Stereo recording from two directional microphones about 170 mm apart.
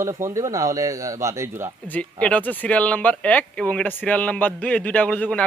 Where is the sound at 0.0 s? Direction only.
15° right (ahead or behind).